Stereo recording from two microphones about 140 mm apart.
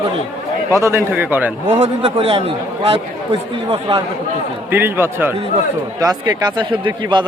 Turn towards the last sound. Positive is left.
turn(degrees=-35)  # may be behind; listen again after turning